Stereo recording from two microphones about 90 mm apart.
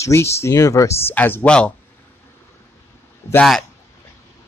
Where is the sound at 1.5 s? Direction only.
10° left (ahead or behind).